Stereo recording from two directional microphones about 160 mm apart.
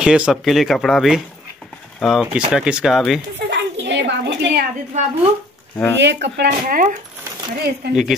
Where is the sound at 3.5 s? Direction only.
90° right.